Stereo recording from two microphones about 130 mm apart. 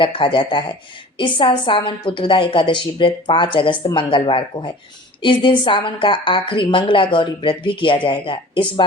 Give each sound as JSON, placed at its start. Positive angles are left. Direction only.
{"t": 0.0, "sound": "a woman's voice", "side_deg": 40}